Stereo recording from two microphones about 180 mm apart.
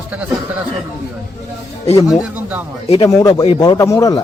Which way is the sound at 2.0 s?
20° left (ahead or behind).